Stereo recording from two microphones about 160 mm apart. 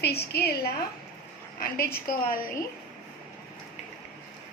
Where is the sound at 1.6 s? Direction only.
70° left (ahead or behind).